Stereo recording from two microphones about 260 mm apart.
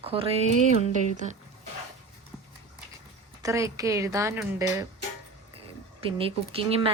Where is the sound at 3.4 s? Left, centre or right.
Centre.